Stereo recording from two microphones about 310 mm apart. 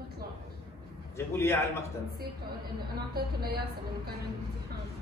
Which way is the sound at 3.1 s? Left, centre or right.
Right.